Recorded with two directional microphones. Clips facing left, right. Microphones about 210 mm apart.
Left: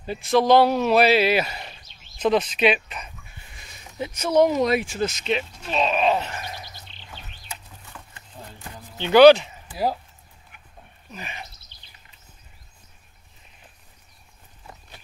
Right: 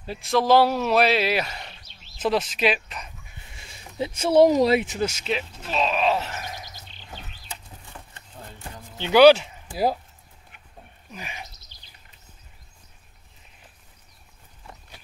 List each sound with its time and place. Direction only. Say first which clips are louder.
0.0 s speech: left 3 dB; centre (ahead or behind)
3.5 s speech: right 2 dB; 25° right (ahead or behind)
4.7 s speech: right 1 dB; 15° right (ahead or behind); by 6.4 s centre (ahead or behind)
9.0 s speech: left 2 dB; 10° right (ahead or behind)
11.1 s speech: left 1 dB; 10° right (ahead or behind)